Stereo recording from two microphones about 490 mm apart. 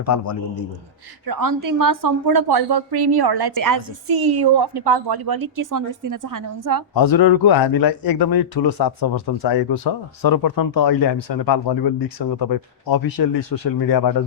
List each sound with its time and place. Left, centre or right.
0.0 s a man's voice: left
1.3 s a woman's voice: right
6.9 s speech: left